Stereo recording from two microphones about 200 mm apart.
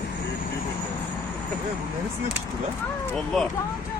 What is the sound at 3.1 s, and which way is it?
Speech, centre (ahead or behind).